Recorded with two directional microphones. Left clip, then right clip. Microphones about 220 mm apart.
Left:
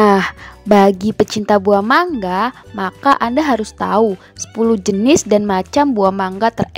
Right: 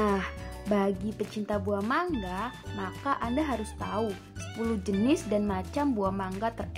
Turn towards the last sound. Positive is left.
turn(degrees=45)  # may be behind; listen again after turning